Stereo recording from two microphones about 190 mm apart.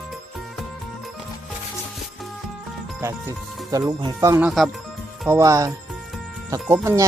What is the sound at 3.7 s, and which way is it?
Speech, 20° right (ahead or behind).